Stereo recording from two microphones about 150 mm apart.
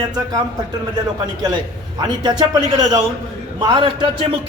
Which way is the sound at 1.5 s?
30° right (ahead or behind).